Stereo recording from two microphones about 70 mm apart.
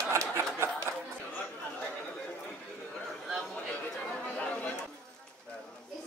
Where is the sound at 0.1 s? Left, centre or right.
Right.